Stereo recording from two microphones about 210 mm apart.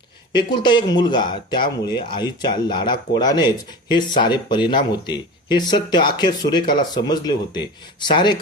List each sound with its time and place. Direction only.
0.3 s speech: 20° left (ahead or behind)